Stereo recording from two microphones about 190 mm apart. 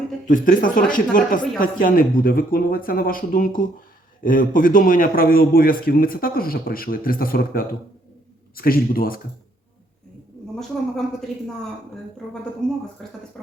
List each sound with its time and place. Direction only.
0.3 s a man's voice: 45° left (ahead or behind)
10.5 s a woman's voice: 5° left (ahead or behind)